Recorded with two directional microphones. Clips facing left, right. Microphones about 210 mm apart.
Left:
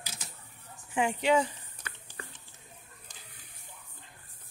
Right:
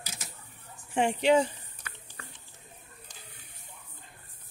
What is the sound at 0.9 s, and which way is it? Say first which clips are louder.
Speech: right 2 dB; 30° right (ahead or behind).